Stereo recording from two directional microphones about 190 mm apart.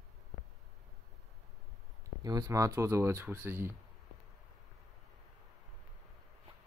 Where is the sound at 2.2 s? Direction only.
20° right (ahead or behind).